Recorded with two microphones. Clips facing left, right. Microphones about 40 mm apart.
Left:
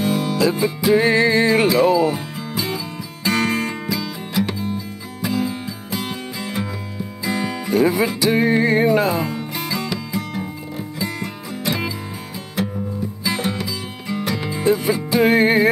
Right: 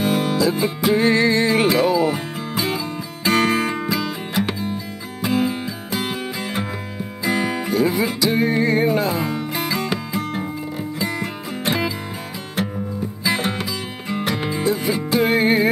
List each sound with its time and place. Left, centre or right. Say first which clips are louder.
0.0 s music: even; right
1.1 s music: left 1 dB; centre
1.5 s speech: left 2 dB; right
2.0 s music: left 1 dB; right
7.7 s speech: left 3 dB; left
8.2 s music: left 2 dB; left
9.2 s music: right 2 dB; right
13.2 s music: right 2 dB; right
14.6 s music: left 5 dB; left